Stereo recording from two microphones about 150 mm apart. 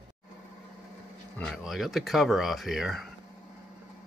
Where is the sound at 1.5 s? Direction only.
Centre (ahead or behind).